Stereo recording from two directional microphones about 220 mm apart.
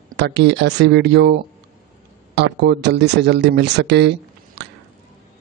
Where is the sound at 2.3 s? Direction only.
50° right (ahead or behind).